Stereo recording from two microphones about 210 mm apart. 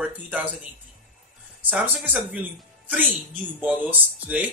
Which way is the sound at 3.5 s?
5° right (ahead or behind).